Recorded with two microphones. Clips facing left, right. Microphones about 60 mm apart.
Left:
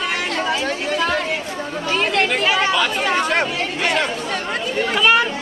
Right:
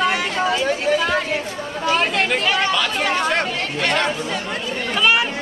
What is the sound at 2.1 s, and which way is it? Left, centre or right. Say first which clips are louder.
Chatter: left 1 dB; centre.